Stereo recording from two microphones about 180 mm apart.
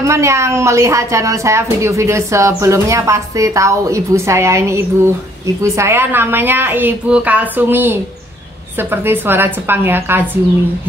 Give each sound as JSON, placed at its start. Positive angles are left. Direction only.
{"t": 0.0, "sound": "a woman's voice", "side_deg": -15}